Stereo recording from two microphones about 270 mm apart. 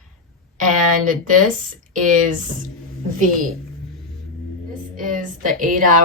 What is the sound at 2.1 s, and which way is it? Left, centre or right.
Speech, right.